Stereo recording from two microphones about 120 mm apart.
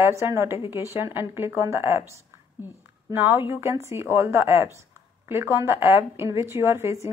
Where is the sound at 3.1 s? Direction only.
20° right (ahead or behind).